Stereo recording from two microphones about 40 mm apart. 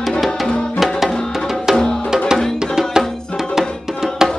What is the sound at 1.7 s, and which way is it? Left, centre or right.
Music, centre.